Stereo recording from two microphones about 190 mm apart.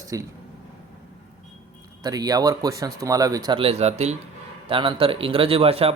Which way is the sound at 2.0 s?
20° right (ahead or behind).